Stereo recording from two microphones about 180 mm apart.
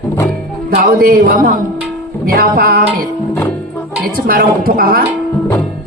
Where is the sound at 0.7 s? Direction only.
50° right (ahead or behind).